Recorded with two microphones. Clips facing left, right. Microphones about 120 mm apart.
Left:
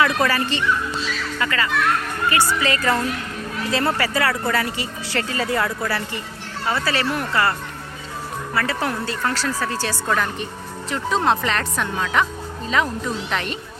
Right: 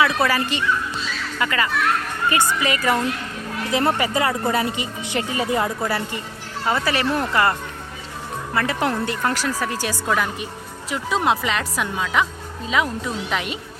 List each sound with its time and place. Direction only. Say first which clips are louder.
0.0 s a child's voice: even; 10° right (ahead or behind)
8.5 s speech: right 2 dB; 20° right (ahead or behind)